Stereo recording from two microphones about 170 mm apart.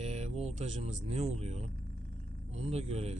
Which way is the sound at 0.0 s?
40° right (ahead or behind).